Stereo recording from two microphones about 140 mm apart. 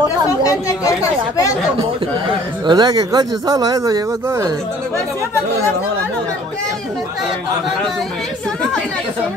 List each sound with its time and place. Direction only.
0.4 s speech: 25° left (ahead or behind)
2.6 s speech: 30° right (ahead or behind)